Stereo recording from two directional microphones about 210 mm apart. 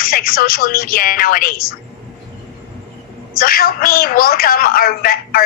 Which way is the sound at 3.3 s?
45° left (ahead or behind).